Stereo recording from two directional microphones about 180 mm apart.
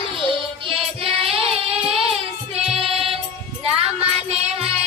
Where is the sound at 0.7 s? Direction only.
30° right (ahead or behind).